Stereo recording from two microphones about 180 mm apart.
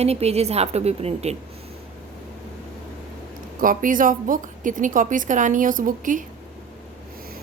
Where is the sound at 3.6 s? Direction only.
50° right (ahead or behind).